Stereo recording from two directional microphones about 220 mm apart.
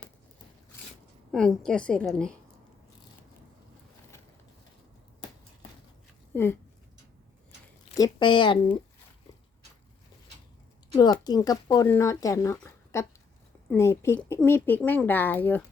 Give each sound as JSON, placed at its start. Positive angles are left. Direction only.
{"t": 1.3, "sound": "a woman's voice", "side_deg": 0}
{"t": 6.3, "sound": "speech", "side_deg": 10}
{"t": 7.9, "sound": "a woman's voice", "side_deg": 20}
{"t": 10.9, "sound": "speech", "side_deg": 20}
{"t": 12.5, "sound": "a sound", "side_deg": 10}
{"t": 13.7, "sound": "speech", "side_deg": 10}